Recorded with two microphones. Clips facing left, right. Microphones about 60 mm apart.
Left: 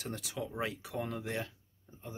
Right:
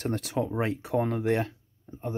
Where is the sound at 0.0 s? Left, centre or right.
Right.